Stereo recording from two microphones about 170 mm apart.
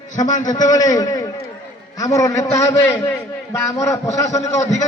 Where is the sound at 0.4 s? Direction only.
25° left (ahead or behind).